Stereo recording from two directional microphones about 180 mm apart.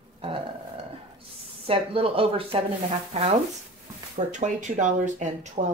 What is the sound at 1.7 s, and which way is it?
Speech, 30° right (ahead or behind).